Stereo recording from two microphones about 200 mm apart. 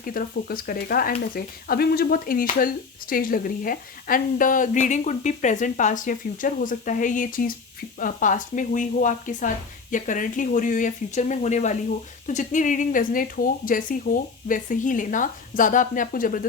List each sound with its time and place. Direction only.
0.0 s a woman's voice: 45° left (ahead or behind)